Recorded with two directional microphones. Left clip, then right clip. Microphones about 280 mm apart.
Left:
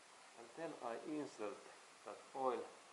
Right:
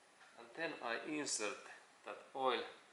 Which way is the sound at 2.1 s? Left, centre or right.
Left.